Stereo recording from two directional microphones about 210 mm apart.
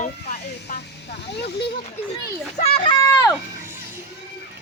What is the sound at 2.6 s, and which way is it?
Speech, 25° left (ahead or behind).